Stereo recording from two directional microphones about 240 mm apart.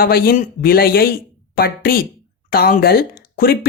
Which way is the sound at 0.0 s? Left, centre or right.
Left.